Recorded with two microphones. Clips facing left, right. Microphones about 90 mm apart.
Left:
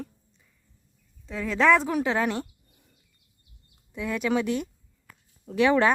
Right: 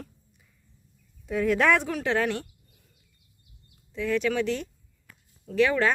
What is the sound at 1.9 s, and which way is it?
Speech, 10° left (ahead or behind).